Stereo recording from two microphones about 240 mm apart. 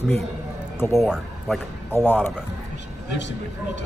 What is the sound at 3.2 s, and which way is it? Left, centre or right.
Speech, left.